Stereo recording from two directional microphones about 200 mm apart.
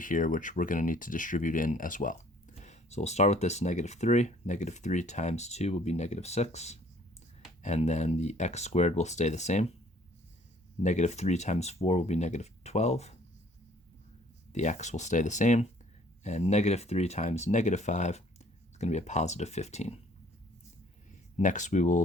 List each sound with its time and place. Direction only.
0.0 s speech: 40° left (ahead or behind)
10.8 s speech: 35° left (ahead or behind)
14.5 s speech: 35° left (ahead or behind)
21.1 s speech: 40° left (ahead or behind)